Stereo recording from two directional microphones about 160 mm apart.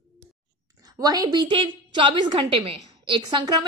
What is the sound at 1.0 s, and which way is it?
A woman's voice, 25° right (ahead or behind).